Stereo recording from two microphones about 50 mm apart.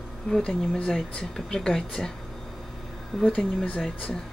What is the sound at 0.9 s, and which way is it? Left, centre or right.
Speech, centre.